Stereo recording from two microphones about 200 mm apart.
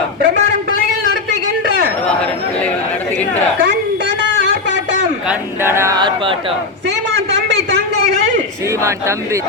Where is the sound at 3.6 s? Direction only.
65° right (ahead or behind).